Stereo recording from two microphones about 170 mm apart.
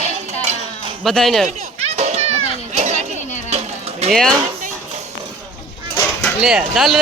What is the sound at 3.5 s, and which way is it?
Music, 40° right (ahead or behind).